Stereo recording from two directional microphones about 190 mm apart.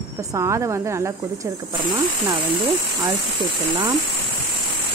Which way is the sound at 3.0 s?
20° right (ahead or behind).